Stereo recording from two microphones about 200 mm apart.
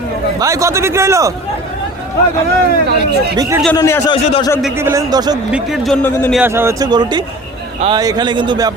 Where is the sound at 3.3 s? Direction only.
20° right (ahead or behind).